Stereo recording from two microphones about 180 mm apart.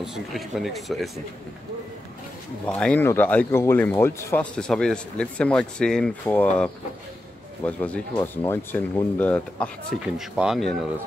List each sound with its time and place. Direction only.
0.0 s speech: centre (ahead or behind)
2.6 s speech: 5° left (ahead or behind)
10.0 s speech: 5° right (ahead or behind)